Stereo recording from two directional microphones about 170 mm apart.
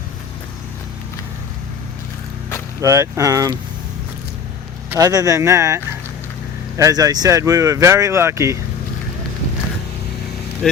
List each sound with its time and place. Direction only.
2.8 s speech: 20° right (ahead or behind)
4.9 s speech: 20° right (ahead or behind)
10.6 s speech: 5° left (ahead or behind)